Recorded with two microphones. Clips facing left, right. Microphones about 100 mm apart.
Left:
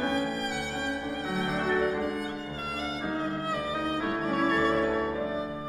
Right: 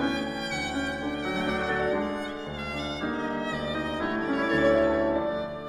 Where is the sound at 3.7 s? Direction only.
20° right (ahead or behind).